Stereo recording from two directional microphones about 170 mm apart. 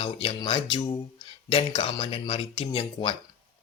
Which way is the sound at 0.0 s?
35° left (ahead or behind).